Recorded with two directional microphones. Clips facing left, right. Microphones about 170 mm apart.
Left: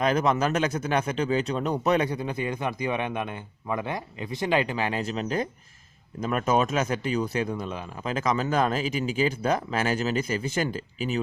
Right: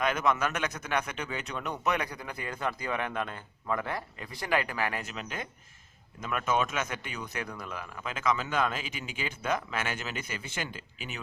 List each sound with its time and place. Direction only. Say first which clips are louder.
0.0 s a man's voice: left 5 dB; 35° left (ahead or behind)